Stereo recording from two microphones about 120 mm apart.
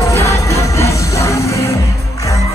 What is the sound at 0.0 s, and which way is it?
Music, 25° left (ahead or behind).